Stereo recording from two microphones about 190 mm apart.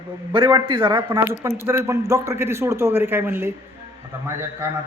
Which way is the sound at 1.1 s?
10° right (ahead or behind).